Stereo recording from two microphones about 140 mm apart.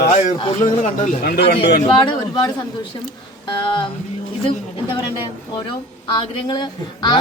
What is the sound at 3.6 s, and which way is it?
Speech, 35° left (ahead or behind).